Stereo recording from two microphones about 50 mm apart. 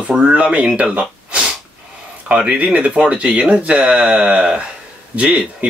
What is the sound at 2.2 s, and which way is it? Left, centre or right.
Speech, right.